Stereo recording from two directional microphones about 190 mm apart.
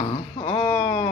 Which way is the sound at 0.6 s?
15° left (ahead or behind).